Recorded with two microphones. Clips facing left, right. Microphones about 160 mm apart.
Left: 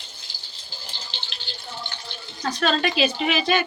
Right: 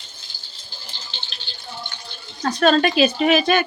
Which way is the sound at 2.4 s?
45° right (ahead or behind).